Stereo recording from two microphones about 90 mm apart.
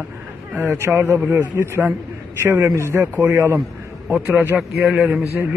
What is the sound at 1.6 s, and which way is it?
Speech, 25° right (ahead or behind).